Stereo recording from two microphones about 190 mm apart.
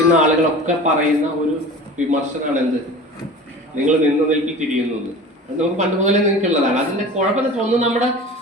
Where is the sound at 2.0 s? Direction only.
40° right (ahead or behind).